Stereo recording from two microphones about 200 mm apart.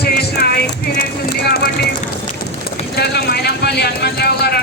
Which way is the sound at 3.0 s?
55° left (ahead or behind).